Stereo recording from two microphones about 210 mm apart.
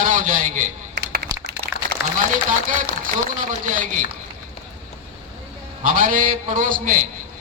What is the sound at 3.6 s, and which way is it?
Speech, 40° right (ahead or behind).